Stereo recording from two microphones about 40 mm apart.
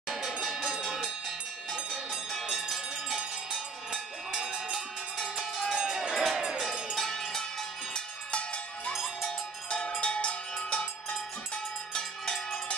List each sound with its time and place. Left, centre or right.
0.4 s a sound: centre
3.2 s cowbell: centre
5.9 s crowd: centre
7.0 s cowbell: centre
7.9 s cowbell: left
11.9 s cowbell: centre